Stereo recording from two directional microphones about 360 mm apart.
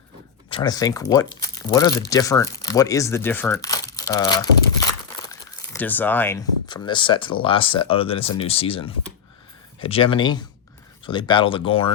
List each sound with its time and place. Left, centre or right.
0.5 s speech: centre